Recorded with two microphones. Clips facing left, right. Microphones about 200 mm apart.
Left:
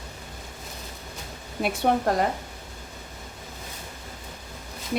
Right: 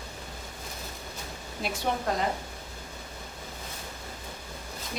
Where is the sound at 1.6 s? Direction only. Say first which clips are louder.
Left 7 dB; 55° left (ahead or behind).